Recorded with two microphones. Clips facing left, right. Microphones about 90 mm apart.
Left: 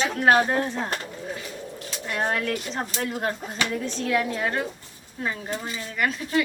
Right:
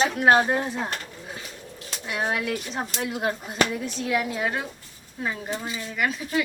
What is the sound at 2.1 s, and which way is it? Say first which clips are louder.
Speech: left 1 dB; 5° right (ahead or behind).